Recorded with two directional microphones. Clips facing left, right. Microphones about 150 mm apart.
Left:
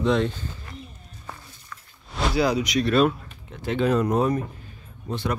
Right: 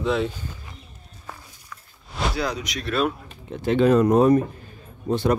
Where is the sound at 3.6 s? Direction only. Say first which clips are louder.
Right 5 dB; 40° right (ahead or behind).